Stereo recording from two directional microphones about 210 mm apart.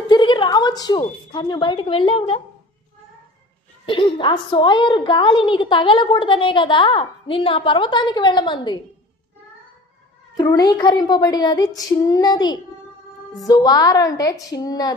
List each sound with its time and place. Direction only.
0.1 s speech: 20° left (ahead or behind)
3.8 s a woman's voice: 25° left (ahead or behind)
10.3 s a woman's voice: 20° left (ahead or behind)